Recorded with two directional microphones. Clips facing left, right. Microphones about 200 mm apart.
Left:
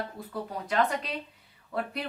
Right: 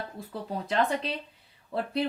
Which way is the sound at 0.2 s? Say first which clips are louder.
Even; 25° right (ahead or behind).